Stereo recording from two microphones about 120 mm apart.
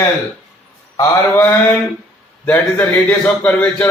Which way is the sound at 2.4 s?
15° left (ahead or behind).